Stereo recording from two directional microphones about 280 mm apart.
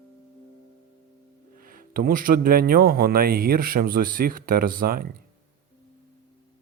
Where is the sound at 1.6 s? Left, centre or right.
Right.